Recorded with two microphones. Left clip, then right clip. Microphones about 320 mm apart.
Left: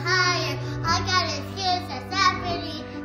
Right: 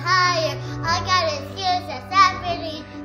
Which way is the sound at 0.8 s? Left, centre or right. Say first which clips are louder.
Right 3 dB; right.